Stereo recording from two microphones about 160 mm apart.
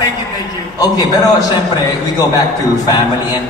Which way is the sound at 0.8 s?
25° left (ahead or behind).